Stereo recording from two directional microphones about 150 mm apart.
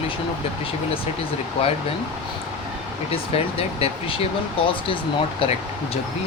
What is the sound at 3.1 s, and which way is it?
Speech, 40° left (ahead or behind).